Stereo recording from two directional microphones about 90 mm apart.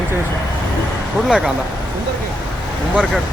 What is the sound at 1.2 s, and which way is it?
Speech, 5° right (ahead or behind).